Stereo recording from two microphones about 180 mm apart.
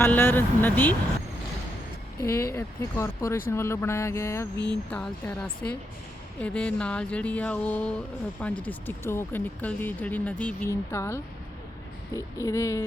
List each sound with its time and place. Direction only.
0.0 s speech: 10° left (ahead or behind)
2.2 s speech: 15° left (ahead or behind)
4.5 s a sound: 25° right (ahead or behind)
4.9 s speech: 5° left (ahead or behind)